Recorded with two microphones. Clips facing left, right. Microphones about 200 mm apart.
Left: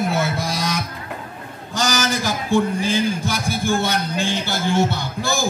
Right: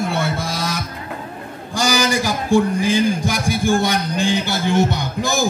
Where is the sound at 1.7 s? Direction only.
10° right (ahead or behind).